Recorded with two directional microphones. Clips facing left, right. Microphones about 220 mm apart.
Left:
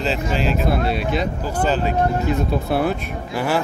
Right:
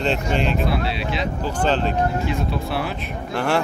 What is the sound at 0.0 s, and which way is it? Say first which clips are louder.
Speech: even; 5° left (ahead or behind).